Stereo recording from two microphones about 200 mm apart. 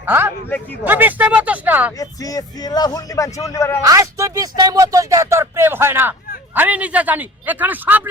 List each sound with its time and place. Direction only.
0.0 s speech: 10° right (ahead or behind)
2.0 s speech: 20° left (ahead or behind)
3.8 s speech: 15° right (ahead or behind)